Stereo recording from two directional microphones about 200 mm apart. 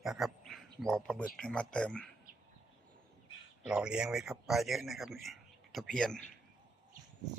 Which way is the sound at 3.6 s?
5° right (ahead or behind).